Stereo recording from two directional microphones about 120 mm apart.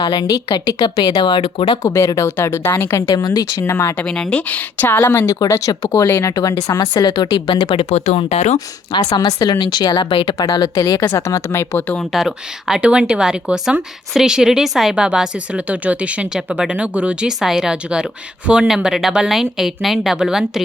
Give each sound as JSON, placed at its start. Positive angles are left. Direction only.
{"t": 0.0, "sound": "speech", "side_deg": 35}
{"t": 1.8, "sound": "a woman's voice", "side_deg": 25}
{"t": 3.9, "sound": "a woman's voice", "side_deg": 5}
{"t": 7.9, "sound": "speech", "side_deg": 70}
{"t": 8.5, "sound": "a woman's voice", "side_deg": 35}
{"t": 11.9, "sound": "speech", "side_deg": 0}